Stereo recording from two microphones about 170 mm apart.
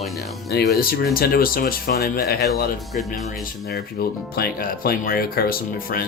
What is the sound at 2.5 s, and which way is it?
Speech, centre (ahead or behind).